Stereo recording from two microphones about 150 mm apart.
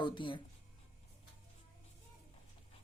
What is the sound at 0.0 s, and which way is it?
Speech, 35° left (ahead or behind).